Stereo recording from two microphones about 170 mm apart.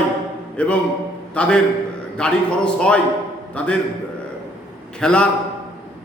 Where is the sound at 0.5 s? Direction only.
5° left (ahead or behind).